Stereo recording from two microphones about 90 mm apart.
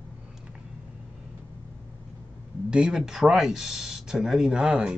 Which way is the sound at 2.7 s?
10° right (ahead or behind).